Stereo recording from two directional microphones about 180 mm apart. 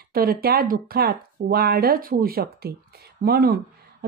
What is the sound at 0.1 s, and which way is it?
Speech, 55° right (ahead or behind).